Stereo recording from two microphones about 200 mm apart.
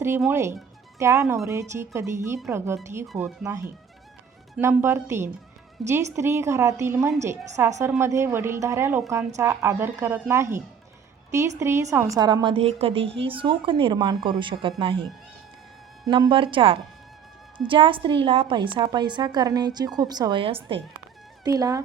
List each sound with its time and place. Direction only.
0.2 s a woman's voice: 10° right (ahead or behind)
1.2 s speech: 5° right (ahead or behind)
1.5 s a woman's voice: 15° right (ahead or behind)
3.4 s a woman's voice: 15° right (ahead or behind)
5.8 s speech: centre (ahead or behind)
6.1 s a woman's voice: 15° right (ahead or behind)
16.0 s a woman's voice: 25° right (ahead or behind)